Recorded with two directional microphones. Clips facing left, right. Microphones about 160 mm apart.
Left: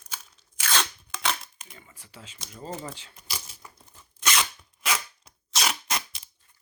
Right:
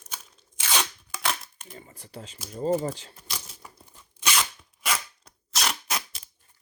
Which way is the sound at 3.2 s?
5° left (ahead or behind).